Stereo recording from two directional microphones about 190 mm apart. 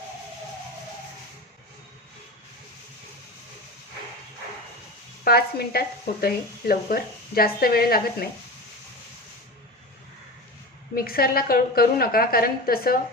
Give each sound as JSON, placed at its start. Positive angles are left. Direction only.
{"t": 5.2, "sound": "a woman's voice", "side_deg": 55}
{"t": 10.9, "sound": "speech", "side_deg": 50}